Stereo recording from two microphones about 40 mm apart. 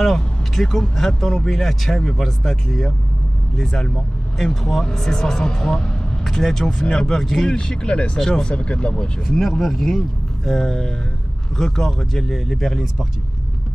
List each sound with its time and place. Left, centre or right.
0.0 s speech: centre
4.4 s speech: centre; by 9.1 s left
9.3 s speech: centre